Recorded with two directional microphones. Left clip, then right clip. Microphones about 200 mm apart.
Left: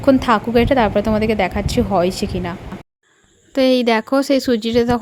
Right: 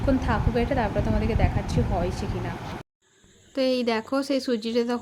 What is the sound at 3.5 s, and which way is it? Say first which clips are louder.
A woman's voice: left 9 dB; 40° left (ahead or behind).